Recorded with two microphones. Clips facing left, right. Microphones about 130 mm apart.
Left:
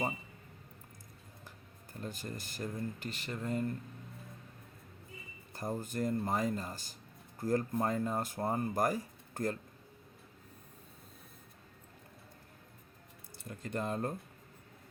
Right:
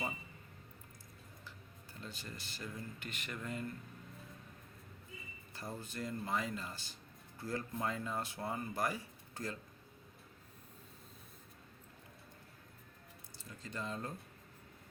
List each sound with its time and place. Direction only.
1.5 s speech: 45° left (ahead or behind)
5.5 s speech: 45° left (ahead or behind)
13.4 s speech: 55° left (ahead or behind)